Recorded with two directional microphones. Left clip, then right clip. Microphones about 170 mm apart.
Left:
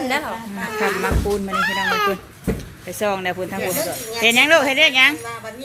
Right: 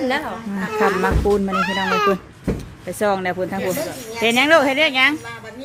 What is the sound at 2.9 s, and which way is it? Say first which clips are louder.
Speech: right 2 dB; 30° right (ahead or behind).